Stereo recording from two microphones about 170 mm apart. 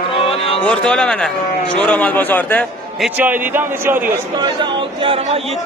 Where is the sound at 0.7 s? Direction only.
5° left (ahead or behind).